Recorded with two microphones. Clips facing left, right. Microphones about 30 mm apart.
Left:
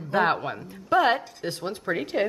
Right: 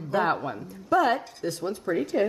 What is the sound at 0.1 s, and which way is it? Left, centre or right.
A woman's voice, left.